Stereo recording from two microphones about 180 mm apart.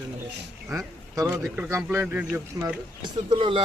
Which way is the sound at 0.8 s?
15° right (ahead or behind).